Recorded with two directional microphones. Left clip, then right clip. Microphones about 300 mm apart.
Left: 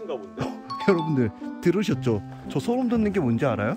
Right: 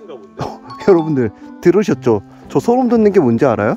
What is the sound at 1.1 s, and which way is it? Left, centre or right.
Speech, centre.